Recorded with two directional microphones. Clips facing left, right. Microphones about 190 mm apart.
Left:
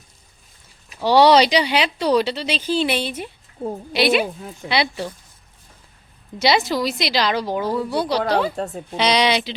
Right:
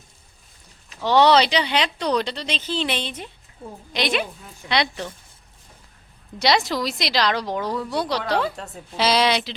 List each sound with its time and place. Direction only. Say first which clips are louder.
1.0 s speech: left 3 dB; 10° left (ahead or behind)
6.4 s a woman's voice: left 2 dB; centre (ahead or behind)
8.5 s a woman's voice: left 9 dB; 40° left (ahead or behind)
9.0 s a woman's voice: left 1 dB; 5° right (ahead or behind)